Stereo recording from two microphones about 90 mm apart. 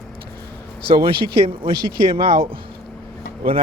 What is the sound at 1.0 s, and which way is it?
Speech, 75° right (ahead or behind).